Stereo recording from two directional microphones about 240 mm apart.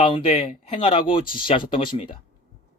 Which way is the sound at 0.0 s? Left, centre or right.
Left.